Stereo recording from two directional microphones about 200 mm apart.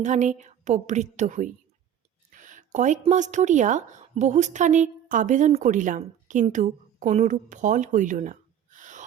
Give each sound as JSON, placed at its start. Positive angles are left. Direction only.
{"t": 0.0, "sound": "a woman's voice", "side_deg": -35}